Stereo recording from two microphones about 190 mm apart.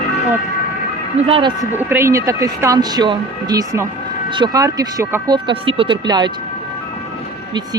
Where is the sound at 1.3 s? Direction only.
25° right (ahead or behind).